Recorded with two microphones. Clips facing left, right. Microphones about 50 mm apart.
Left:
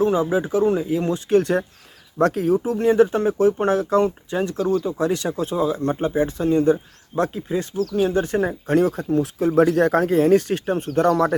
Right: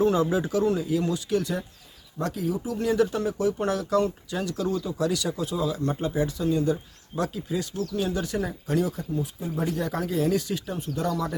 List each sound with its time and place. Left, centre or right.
0.0 s speech: left
9.1 s speech: left